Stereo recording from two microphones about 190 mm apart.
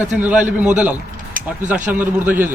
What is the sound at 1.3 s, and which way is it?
Vehicle, 45° right (ahead or behind).